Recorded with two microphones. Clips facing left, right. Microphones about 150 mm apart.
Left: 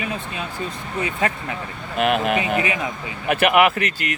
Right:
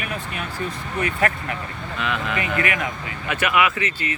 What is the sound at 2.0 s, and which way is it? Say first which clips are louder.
Speech: left 7 dB; 60° left (ahead or behind).